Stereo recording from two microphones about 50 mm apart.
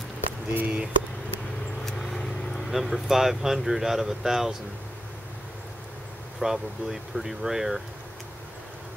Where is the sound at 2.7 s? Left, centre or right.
Centre.